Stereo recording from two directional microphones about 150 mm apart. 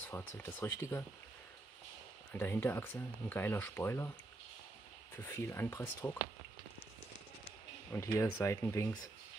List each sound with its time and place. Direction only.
0.0 s speech: 15° left (ahead or behind)
2.3 s speech: 15° left (ahead or behind)
5.1 s speech: 15° left (ahead or behind)
7.9 s speech: 15° left (ahead or behind)